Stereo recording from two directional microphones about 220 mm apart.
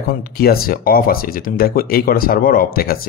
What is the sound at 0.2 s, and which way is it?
Speech, 45° left (ahead or behind).